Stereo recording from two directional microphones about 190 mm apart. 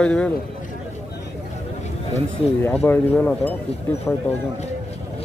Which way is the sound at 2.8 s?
10° left (ahead or behind).